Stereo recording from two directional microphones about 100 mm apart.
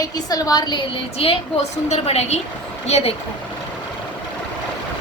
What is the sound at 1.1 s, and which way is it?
A woman's voice, 80° left.